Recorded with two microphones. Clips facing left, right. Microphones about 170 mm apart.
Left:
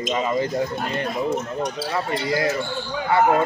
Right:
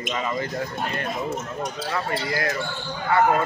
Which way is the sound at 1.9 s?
20° left (ahead or behind).